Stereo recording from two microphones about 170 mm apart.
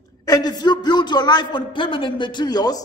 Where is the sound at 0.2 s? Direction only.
20° left (ahead or behind).